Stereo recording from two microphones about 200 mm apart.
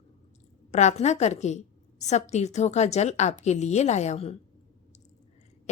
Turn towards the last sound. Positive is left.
turn(degrees=30)  # may be behind; listen again after turning